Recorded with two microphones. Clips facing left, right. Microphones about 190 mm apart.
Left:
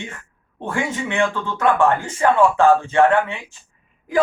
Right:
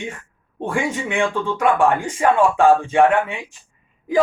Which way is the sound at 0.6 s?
15° right (ahead or behind).